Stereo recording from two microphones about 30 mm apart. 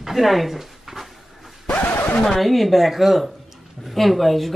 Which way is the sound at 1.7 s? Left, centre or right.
Left.